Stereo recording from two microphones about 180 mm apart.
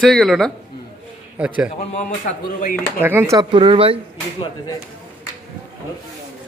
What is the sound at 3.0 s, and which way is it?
Speech, 10° right (ahead or behind).